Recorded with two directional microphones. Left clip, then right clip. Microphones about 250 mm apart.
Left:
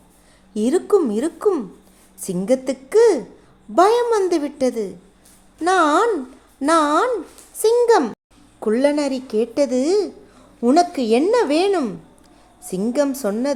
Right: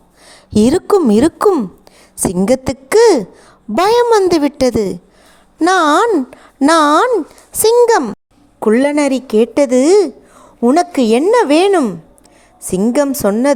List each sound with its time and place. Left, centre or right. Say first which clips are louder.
0.3 s speech: right 8 dB; right